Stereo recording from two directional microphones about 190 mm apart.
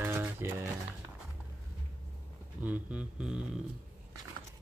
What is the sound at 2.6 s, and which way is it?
Speech, 5° right (ahead or behind).